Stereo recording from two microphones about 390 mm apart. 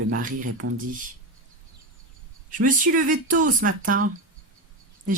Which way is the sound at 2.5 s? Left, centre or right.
Centre.